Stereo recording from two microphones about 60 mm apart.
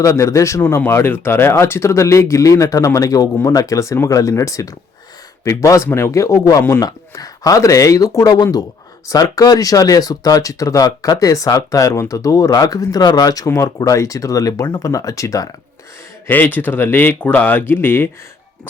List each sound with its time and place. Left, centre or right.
0.0 s speech: left
0.9 s speech: left
6.8 s speech: left
16.3 s speech: left